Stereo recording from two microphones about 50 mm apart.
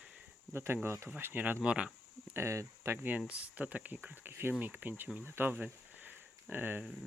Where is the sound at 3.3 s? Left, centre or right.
Right.